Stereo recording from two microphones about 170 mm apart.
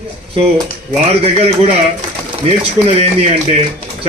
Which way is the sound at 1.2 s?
35° right (ahead or behind).